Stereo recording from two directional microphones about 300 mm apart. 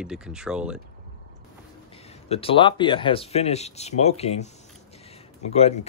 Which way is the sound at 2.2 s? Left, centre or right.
Centre.